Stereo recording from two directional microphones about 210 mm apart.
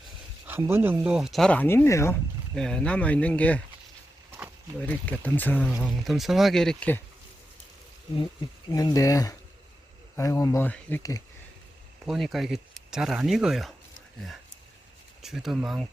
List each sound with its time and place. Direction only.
0.4 s speech: 10° right (ahead or behind); by 3.6 s 5° left (ahead or behind)
4.8 s speech: 5° left (ahead or behind)
8.7 s speech: 15° left (ahead or behind)
12.0 s speech: centre (ahead or behind)
15.2 s speech: centre (ahead or behind)